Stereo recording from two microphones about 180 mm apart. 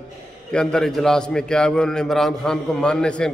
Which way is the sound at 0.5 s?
5° left (ahead or behind).